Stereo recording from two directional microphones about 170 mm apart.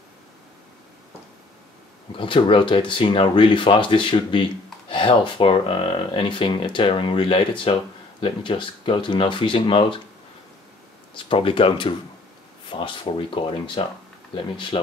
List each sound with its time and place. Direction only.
2.1 s speech: 30° left (ahead or behind)
11.2 s speech: 30° left (ahead or behind)